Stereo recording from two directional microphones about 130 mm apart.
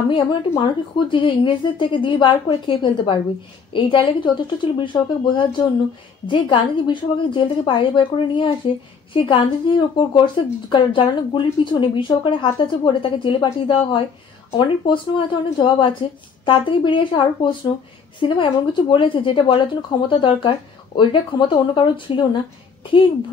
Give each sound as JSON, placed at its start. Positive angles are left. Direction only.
{"t": 0.1, "sound": "a woman's voice", "side_deg": 40}